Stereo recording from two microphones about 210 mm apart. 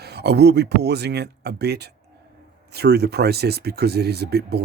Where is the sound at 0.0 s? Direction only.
50° right (ahead or behind).